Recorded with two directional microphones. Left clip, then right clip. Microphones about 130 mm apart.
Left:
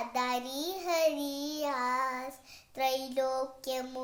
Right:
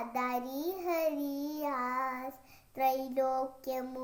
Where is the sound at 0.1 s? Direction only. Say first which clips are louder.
Left 2 dB; 15° left (ahead or behind).